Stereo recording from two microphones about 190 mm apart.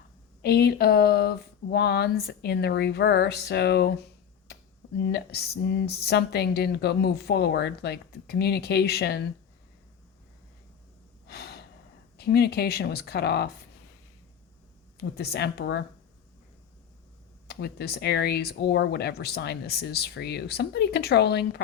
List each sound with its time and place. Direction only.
0.4 s speech: 55° left (ahead or behind)
11.3 s gasp: 60° left (ahead or behind)
12.1 s speech: 55° left (ahead or behind)
14.9 s speech: 55° left (ahead or behind)
17.5 s speech: 55° left (ahead or behind)